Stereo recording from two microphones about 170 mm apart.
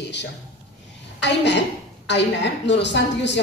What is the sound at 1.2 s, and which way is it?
A woman's voice, 90° left.